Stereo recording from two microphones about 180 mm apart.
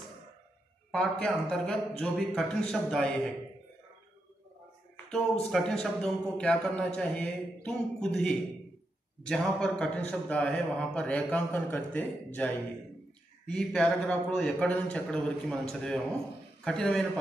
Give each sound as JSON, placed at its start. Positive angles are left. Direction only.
{"t": 0.9, "sound": "a man's voice", "side_deg": 5}
{"t": 4.9, "sound": "a man's voice", "side_deg": 5}